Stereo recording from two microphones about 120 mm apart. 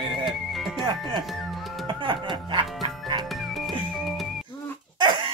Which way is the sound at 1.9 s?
45° right (ahead or behind).